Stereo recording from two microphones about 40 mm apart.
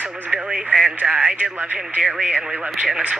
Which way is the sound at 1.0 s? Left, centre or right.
Right.